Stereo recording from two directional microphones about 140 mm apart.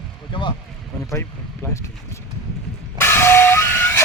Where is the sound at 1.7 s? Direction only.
20° left (ahead or behind).